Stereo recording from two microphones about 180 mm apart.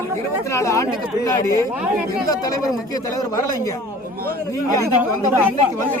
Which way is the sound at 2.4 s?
20° left (ahead or behind).